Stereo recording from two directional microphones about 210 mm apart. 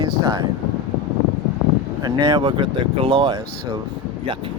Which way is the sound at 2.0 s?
20° right (ahead or behind).